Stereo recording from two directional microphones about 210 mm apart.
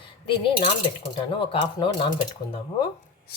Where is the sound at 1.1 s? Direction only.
25° left (ahead or behind).